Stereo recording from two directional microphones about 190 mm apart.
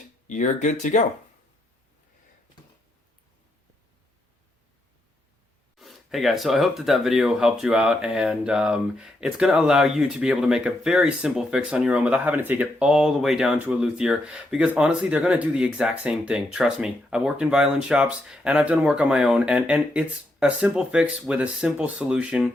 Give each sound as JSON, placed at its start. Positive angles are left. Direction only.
{"t": 0.3, "sound": "speech", "side_deg": 40}
{"t": 5.7, "sound": "speech", "side_deg": 0}